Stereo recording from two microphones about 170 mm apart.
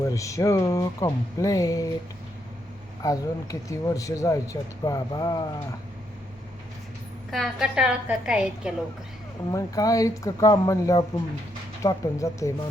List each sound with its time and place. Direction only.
0.1 s speech: 20° left (ahead or behind)
3.0 s speech: 20° left (ahead or behind)
7.3 s a woman's voice: centre (ahead or behind)
9.5 s speech: 20° left (ahead or behind)